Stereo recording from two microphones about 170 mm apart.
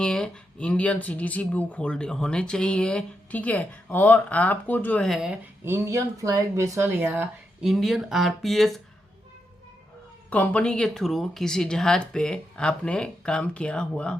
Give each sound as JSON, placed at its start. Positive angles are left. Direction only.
{"t": 0.0, "sound": "speech", "side_deg": 5}
{"t": 5.6, "sound": "speech", "side_deg": -15}
{"t": 7.6, "sound": "speech", "side_deg": 0}
{"t": 10.2, "sound": "speech", "side_deg": 10}